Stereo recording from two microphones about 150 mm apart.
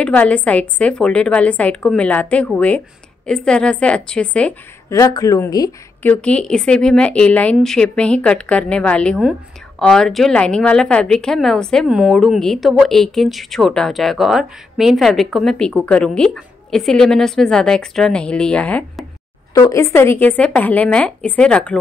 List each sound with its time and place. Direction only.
0.0 s a woman's voice: 10° left (ahead or behind)
4.8 s speech: 20° left (ahead or behind)
6.0 s a woman's voice: 5° left (ahead or behind)